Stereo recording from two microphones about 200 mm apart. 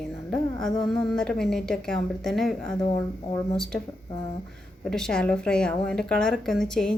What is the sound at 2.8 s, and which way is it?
Speech, 20° left (ahead or behind).